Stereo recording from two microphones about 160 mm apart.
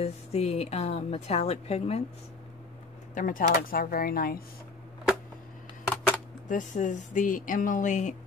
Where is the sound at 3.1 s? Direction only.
55° left (ahead or behind).